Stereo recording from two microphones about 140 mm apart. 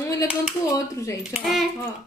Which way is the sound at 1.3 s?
Centre (ahead or behind).